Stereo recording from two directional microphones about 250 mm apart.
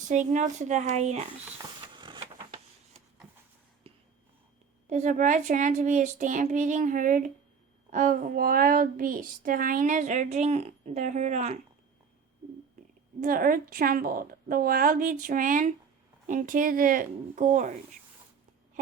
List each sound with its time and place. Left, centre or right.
0.1 s speech: right
1.9 s vehicle: centre
3.9 s whispering: right
4.9 s speech: right
13.1 s speech: right